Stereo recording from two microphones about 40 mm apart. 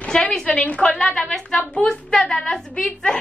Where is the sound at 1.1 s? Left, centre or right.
Centre.